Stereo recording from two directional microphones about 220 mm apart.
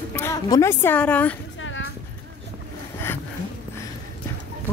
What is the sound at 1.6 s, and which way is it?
Music, 60° left (ahead or behind).